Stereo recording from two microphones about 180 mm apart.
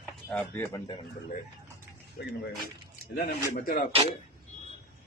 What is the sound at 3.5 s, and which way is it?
Speech, 55° left (ahead or behind).